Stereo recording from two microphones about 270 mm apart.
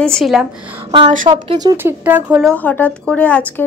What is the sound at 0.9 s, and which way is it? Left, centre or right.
A woman's voice, right.